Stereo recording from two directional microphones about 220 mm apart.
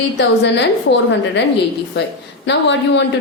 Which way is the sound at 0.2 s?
55° left (ahead or behind).